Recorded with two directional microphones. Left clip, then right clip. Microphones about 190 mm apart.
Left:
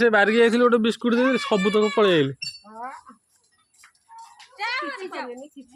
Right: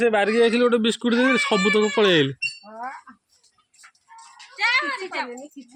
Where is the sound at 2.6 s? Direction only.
55° right (ahead or behind).